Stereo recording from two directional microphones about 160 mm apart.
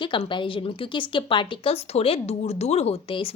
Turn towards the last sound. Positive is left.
turn(degrees=35)  # may be behind; listen again after turning